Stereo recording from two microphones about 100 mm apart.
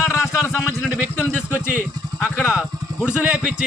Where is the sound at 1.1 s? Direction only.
20° left (ahead or behind).